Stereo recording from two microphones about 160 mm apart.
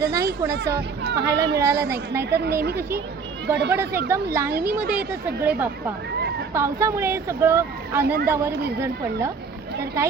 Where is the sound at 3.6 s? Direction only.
90° right.